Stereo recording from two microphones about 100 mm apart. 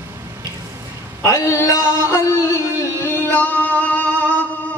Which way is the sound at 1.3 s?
30° left (ahead or behind).